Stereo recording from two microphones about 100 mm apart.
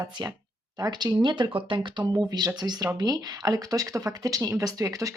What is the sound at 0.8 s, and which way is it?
Speech, 45° right (ahead or behind).